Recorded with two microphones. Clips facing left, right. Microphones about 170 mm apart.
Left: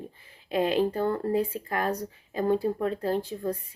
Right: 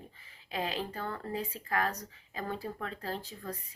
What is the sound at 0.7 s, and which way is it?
Speech, 40° left (ahead or behind).